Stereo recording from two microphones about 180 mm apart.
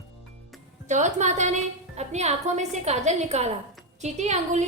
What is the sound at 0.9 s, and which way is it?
A woman's voice, 40° right (ahead or behind).